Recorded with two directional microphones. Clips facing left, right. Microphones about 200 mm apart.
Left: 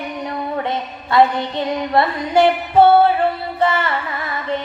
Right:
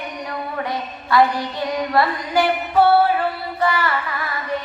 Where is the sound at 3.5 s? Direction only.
25° left (ahead or behind).